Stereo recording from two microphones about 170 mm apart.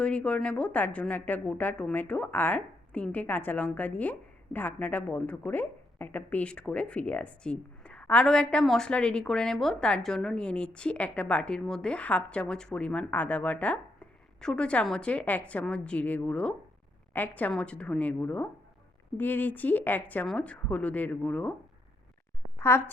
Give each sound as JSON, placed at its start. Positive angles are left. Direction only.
{"t": 0.0, "sound": "a woman's voice", "side_deg": 5}
{"t": 22.6, "sound": "a woman's voice", "side_deg": 15}